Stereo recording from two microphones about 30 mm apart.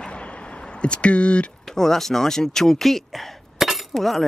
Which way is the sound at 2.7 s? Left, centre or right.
Centre.